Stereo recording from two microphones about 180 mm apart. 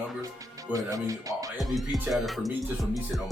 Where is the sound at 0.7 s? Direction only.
20° right (ahead or behind).